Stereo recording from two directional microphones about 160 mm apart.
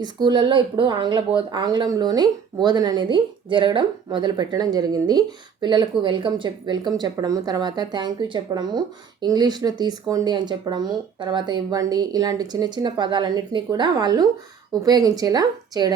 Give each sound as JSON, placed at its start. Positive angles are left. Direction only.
{"t": 0.0, "sound": "speech", "side_deg": -30}